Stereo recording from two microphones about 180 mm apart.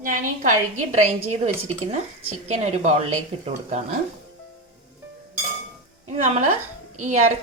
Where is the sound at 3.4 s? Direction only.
40° right (ahead or behind).